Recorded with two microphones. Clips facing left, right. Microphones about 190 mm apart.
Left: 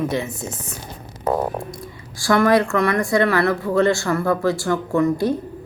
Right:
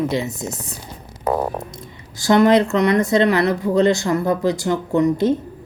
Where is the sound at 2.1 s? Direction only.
20° right (ahead or behind).